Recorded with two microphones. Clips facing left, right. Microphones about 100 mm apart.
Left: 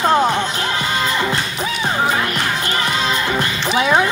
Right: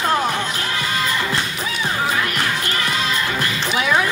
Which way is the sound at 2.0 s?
30° left (ahead or behind).